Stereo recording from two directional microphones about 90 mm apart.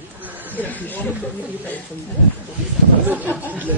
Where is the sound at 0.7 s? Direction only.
20° left (ahead or behind).